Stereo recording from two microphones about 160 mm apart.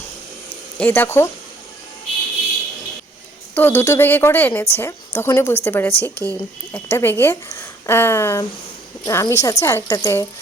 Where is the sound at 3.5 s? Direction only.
15° left (ahead or behind).